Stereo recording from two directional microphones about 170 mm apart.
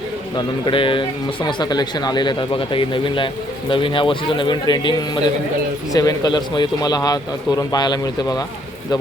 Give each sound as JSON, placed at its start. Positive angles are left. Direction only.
{"t": 0.3, "sound": "speech", "side_deg": 30}